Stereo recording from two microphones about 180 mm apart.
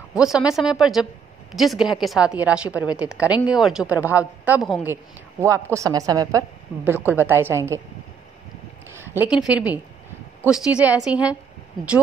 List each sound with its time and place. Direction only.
0.1 s a woman's voice: 5° right (ahead or behind)
5.4 s a woman's voice: 15° right (ahead or behind)
8.9 s a woman's voice: 10° right (ahead or behind)